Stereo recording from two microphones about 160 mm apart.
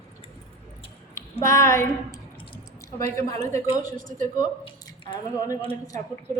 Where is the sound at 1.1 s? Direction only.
15° left (ahead or behind).